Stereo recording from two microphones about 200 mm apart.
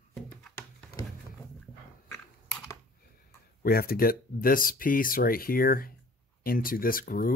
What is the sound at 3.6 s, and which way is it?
Speech, 50° left (ahead or behind).